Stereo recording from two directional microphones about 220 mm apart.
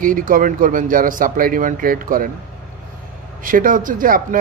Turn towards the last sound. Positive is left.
turn(degrees=-40)  # may be behind; listen again after turning